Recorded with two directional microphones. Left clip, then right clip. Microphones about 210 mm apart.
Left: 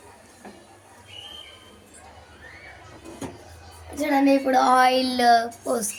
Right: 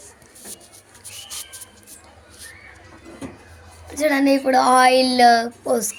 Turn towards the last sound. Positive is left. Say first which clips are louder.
# right 5 dB
turn(degrees=-15)  # may be behind; listen again after turning